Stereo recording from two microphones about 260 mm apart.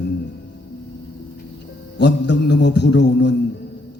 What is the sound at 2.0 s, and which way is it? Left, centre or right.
Mantra, left.